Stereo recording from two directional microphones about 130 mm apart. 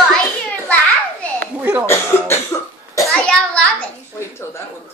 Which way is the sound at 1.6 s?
15° right (ahead or behind).